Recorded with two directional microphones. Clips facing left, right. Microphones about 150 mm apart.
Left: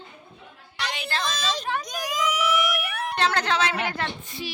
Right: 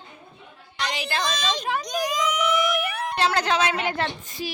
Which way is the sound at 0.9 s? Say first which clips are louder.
Right 2 dB; 15° right (ahead or behind).